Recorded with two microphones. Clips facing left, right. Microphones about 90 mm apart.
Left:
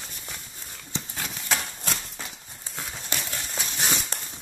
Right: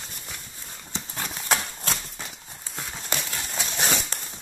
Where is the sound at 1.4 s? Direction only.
55° right (ahead or behind).